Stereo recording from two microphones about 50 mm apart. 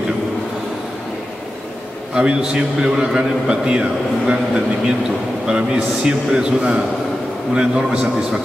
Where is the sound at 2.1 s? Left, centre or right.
Centre.